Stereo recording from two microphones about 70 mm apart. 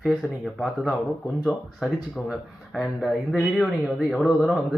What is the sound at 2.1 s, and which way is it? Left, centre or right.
Speech, centre.